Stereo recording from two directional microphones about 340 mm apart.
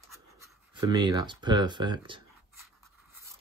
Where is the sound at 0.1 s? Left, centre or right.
Centre.